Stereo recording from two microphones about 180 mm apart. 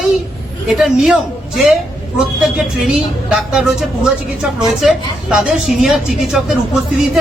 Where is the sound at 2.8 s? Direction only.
5° right (ahead or behind).